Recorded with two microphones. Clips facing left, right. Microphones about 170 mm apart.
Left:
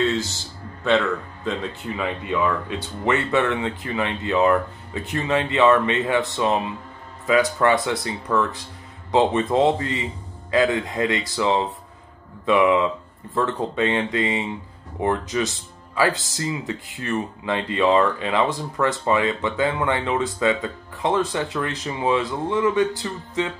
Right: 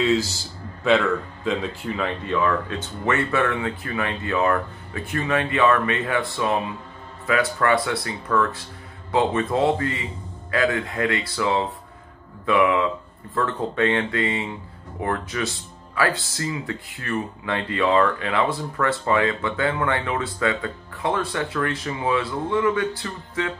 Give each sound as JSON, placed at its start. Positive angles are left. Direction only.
{"t": 0.8, "sound": "speech", "side_deg": -5}